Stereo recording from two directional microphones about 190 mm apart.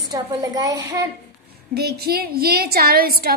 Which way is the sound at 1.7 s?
55° right (ahead or behind).